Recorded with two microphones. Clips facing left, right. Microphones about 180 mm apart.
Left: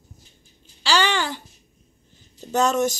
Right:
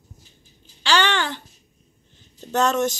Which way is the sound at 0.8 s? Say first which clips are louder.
Even; 5° left (ahead or behind).